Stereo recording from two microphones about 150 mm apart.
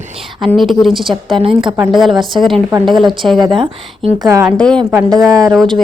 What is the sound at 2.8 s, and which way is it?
Speech, centre (ahead or behind).